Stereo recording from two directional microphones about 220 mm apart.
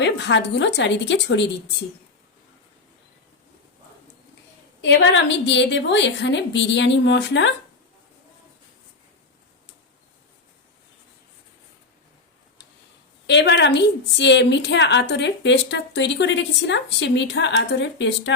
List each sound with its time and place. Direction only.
0.0 s a woman's voice: 55° left (ahead or behind)
4.8 s a woman's voice: 55° left (ahead or behind)
13.2 s a woman's voice: 50° left (ahead or behind)